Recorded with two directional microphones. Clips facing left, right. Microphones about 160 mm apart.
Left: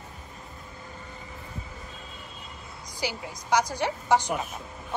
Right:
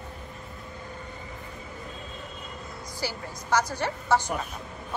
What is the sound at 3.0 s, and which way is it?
A woman's voice, 15° left (ahead or behind).